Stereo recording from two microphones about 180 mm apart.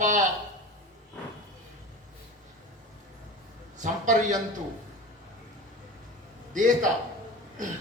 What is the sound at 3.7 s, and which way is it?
Speech, 45° right (ahead or behind).